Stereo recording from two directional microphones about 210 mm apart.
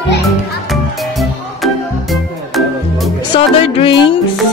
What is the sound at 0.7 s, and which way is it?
Music, centre (ahead or behind).